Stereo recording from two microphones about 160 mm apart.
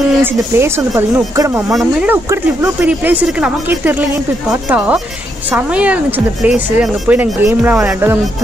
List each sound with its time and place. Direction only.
0.2 s speech: 15° right (ahead or behind)
1.7 s speech: centre (ahead or behind)
2.2 s speech: 15° right (ahead or behind)